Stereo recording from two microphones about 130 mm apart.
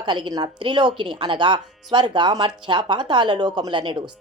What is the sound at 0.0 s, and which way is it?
Speech, 35° right (ahead or behind).